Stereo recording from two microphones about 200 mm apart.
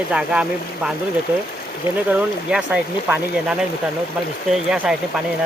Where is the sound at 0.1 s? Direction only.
5° right (ahead or behind).